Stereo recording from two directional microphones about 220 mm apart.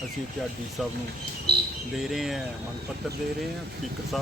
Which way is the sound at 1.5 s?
45° right (ahead or behind).